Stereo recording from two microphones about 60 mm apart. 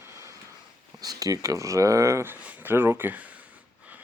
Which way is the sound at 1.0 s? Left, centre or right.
Right.